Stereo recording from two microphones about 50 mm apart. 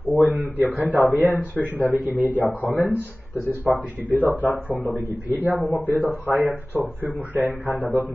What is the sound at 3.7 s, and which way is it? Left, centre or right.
Speech, right.